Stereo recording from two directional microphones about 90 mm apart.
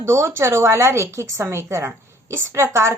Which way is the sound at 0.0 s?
30° right (ahead or behind).